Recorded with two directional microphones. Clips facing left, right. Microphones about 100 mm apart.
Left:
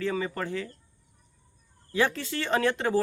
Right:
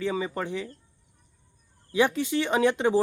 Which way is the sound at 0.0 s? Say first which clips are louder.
Right 1 dB; 15° right (ahead or behind).